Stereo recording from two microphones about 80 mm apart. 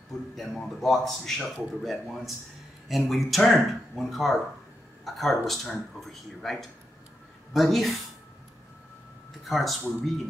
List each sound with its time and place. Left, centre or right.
0.4 s speech: centre
9.4 s speech: centre